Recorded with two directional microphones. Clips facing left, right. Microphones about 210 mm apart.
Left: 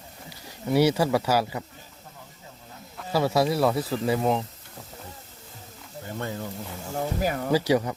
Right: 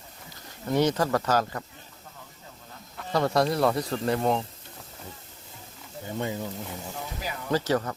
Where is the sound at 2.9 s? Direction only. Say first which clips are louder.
Left 1 dB; 5° left (ahead or behind).